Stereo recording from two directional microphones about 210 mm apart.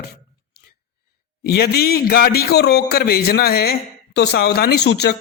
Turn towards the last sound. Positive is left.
turn(degrees=55)  # may be behind; listen again after turning